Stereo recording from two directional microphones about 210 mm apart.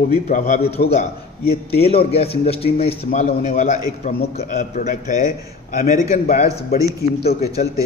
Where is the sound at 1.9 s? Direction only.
30° left (ahead or behind).